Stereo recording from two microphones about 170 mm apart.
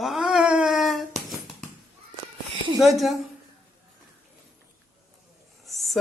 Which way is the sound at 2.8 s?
Centre (ahead or behind).